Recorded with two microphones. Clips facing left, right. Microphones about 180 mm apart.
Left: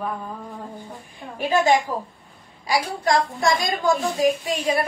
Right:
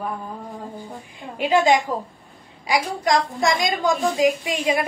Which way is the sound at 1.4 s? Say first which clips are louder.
Right 2 dB; 20° right (ahead or behind).